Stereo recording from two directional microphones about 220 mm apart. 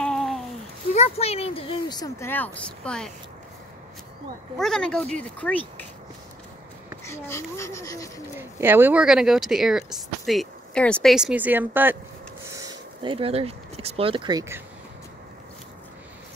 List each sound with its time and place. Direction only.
0.0 s a sound: centre (ahead or behind)
0.9 s speech: 30° left (ahead or behind); by 3.1 s 5° left (ahead or behind)
4.6 s speech: centre (ahead or behind)
7.1 s speech: 10° left (ahead or behind)
8.4 s speech: 10° right (ahead or behind)
12.5 s a sound: 25° right (ahead or behind)